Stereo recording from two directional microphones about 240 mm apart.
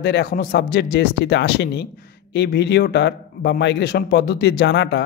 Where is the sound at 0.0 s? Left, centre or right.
Left.